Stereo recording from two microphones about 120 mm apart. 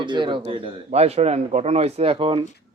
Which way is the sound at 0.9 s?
65° right (ahead or behind).